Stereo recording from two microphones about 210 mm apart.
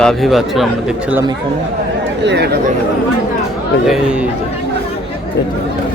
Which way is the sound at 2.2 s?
50° right (ahead or behind).